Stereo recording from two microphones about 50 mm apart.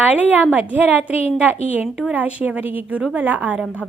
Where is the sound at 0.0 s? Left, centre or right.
Right.